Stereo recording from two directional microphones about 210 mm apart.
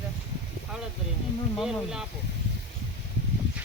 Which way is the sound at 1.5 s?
Centre (ahead or behind).